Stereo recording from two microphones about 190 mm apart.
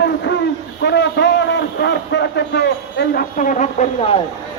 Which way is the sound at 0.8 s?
65° left (ahead or behind).